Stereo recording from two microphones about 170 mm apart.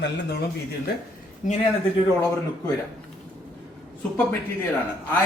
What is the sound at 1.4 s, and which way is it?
Speech, 45° left (ahead or behind).